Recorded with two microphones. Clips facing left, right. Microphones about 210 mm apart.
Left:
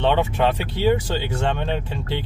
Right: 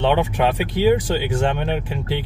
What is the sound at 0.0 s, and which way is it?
Speech, 15° right (ahead or behind).